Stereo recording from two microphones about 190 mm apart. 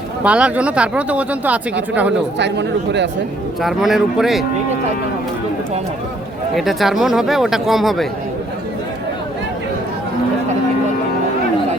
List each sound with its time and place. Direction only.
0.3 s speech: 5° right (ahead or behind)
2.4 s speech: 65° right (ahead or behind)
3.6 s speech: centre (ahead or behind)
6.5 s speech: centre (ahead or behind)